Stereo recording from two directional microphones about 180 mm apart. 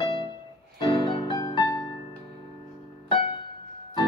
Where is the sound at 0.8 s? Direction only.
25° left (ahead or behind).